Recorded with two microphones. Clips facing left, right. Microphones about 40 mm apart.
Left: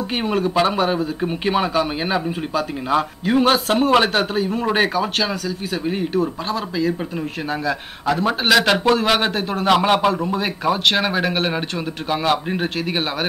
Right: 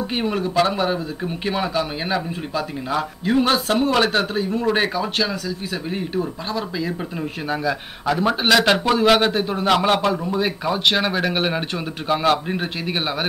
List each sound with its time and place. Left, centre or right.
0.2 s speech: centre
7.6 s speech: centre